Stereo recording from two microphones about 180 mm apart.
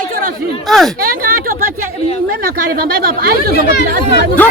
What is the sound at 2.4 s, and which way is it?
Speech, 55° right (ahead or behind).